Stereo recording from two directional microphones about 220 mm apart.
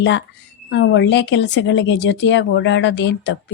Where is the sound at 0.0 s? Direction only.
55° left (ahead or behind).